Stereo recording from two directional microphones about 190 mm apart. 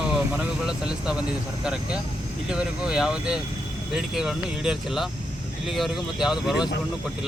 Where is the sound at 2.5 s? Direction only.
5° right (ahead or behind).